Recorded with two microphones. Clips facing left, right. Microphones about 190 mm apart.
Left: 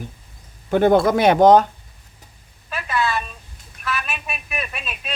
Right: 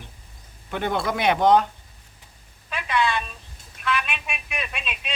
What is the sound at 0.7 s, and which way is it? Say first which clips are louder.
Speech: left 11 dB; 40° left (ahead or behind).